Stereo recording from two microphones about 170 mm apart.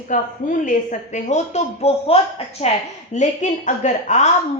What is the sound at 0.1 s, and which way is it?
A woman's voice, 50° left (ahead or behind).